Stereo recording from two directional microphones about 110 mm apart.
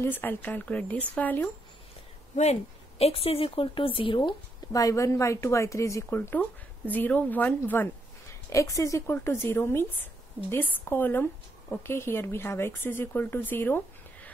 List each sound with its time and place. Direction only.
0.0 s speech: 20° left (ahead or behind)
2.3 s a woman's voice: 85° left; by 6.0 s 30° left (ahead or behind)
6.0 s a woman's voice: 20° left (ahead or behind)